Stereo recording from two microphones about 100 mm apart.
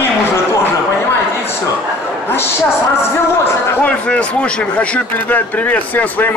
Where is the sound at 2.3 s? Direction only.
25° left (ahead or behind).